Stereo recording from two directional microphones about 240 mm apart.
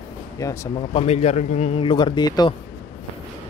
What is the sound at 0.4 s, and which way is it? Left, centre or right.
A man's voice, centre.